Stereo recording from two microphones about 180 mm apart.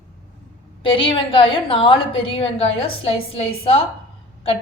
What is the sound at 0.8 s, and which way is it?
A woman's voice, 30° left (ahead or behind).